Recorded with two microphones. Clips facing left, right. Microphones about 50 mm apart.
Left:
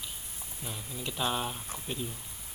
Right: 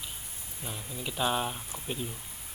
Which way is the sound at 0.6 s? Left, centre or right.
Centre.